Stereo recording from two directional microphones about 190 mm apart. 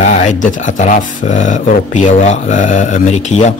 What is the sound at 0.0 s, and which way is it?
Speech, 40° left (ahead or behind).